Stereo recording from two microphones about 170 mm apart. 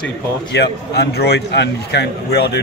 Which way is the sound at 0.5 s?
75° left (ahead or behind).